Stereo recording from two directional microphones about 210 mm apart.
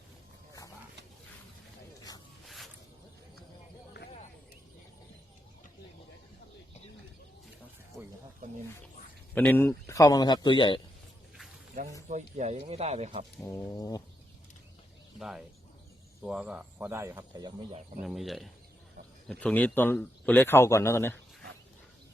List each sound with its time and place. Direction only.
9.3 s speech: 10° left (ahead or behind)
12.0 s speech: 35° right (ahead or behind)
13.7 s speech: 15° left (ahead or behind)
15.2 s speech: centre (ahead or behind); by 17.7 s 20° right (ahead or behind)
18.0 s speech: centre (ahead or behind)